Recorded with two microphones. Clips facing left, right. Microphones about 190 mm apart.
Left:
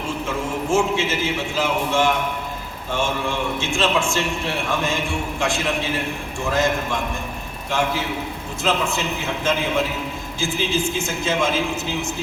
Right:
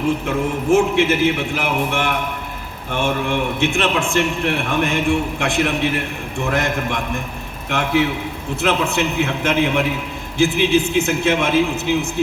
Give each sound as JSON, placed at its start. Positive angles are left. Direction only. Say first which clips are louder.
{"t": 0.3, "sound": "a man's voice", "louder": "right 3 dB", "side_deg": -60}